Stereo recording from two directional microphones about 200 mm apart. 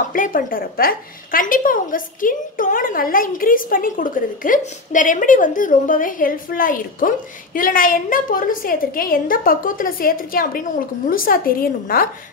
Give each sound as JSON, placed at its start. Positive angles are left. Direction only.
{"t": 0.1, "sound": "a woman's voice", "side_deg": 45}